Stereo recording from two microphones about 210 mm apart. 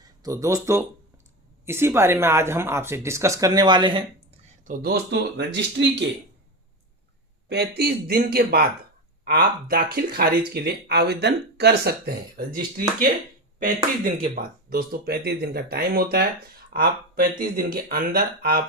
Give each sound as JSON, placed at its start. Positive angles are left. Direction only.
{"t": 0.2, "sound": "speech", "side_deg": -15}
{"t": 4.4, "sound": "speech", "side_deg": -40}
{"t": 5.8, "sound": "speech", "side_deg": -60}
{"t": 7.8, "sound": "speech", "side_deg": -50}